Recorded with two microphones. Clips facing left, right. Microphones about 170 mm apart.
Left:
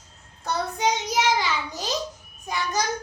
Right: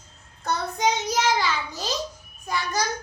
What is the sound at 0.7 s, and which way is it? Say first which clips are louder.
Child singing: right 1 dB; 15° left (ahead or behind).